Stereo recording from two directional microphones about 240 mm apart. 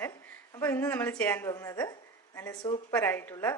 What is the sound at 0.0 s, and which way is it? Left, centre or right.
A woman's voice, centre.